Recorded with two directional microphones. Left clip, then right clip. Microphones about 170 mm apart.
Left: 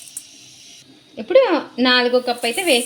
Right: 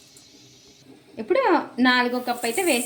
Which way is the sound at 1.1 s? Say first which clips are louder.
Left 6 dB; 30° left (ahead or behind).